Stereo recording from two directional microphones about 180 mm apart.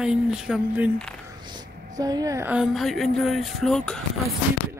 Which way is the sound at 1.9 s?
20° right (ahead or behind).